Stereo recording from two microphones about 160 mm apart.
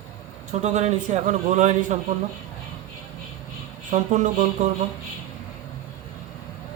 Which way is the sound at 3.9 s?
50° right (ahead or behind).